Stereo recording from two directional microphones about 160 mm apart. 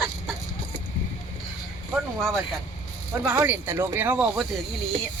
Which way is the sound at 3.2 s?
10° right (ahead or behind).